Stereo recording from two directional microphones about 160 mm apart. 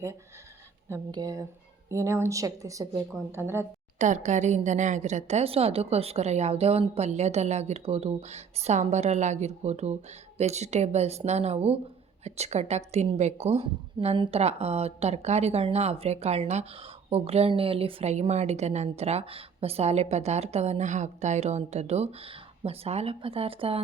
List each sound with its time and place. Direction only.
1.1 s a woman's voice: 25° right (ahead or behind)
3.9 s a woman's voice: 50° right (ahead or behind)